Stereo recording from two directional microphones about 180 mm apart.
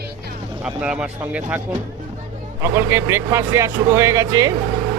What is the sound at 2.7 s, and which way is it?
Speech, 15° right (ahead or behind).